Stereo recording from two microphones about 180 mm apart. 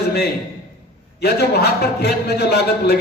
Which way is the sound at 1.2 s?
65° left (ahead or behind).